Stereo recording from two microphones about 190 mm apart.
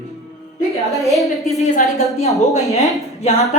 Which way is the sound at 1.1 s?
Centre (ahead or behind).